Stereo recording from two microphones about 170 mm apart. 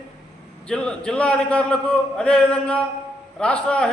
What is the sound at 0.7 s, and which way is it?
A man's voice, 5° left (ahead or behind).